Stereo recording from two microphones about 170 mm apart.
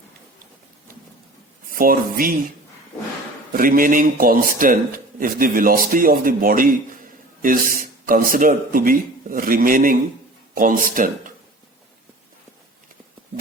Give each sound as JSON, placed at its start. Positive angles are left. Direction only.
{"t": 1.6, "sound": "speech", "side_deg": -55}
{"t": 3.5, "sound": "speech", "side_deg": -55}